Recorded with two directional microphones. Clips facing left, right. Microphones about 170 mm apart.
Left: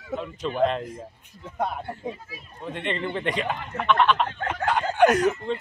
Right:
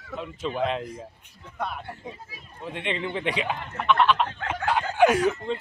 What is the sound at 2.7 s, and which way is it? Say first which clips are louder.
Speech: left 1 dB; 5° right (ahead or behind).